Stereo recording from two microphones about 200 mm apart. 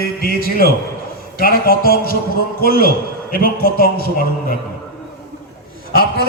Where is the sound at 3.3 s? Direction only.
45° left (ahead or behind).